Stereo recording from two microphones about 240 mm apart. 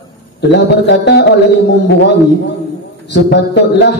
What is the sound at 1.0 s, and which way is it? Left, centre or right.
Speech, left.